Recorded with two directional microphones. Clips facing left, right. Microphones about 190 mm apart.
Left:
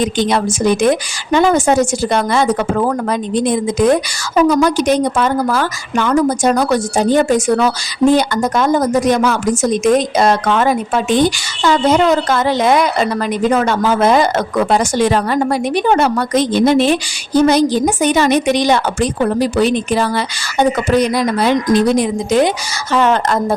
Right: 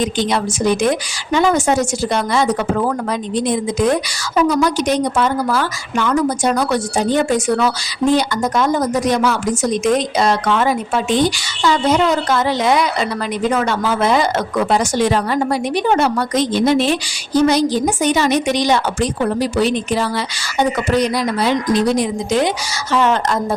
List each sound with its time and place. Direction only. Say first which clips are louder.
0.3 s speech: left 3 dB; 55° left (ahead or behind)